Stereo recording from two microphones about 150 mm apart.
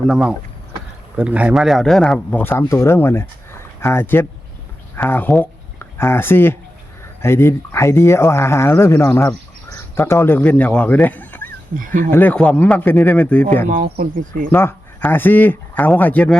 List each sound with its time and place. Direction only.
0.1 s speech: 5° right (ahead or behind); by 11.4 s 10° left (ahead or behind)
11.8 s speech: 65° right (ahead or behind)
12.1 s speech: 10° left (ahead or behind)
13.7 s speech: 80° right
14.5 s speech: 15° left (ahead or behind)